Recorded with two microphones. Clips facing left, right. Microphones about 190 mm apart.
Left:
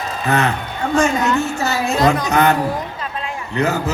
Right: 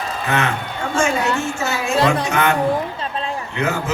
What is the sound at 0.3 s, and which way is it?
Speech, 35° left (ahead or behind).